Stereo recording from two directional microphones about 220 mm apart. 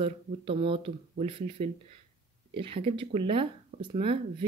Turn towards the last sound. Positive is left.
turn(degrees=-25)  # may be behind; listen again after turning